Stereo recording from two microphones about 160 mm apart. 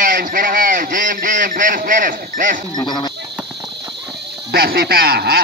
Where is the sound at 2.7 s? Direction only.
25° left (ahead or behind).